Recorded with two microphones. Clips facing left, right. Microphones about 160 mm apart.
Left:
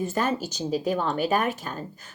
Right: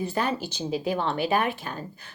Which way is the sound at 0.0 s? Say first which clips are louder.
Left 1 dB; 45° left (ahead or behind).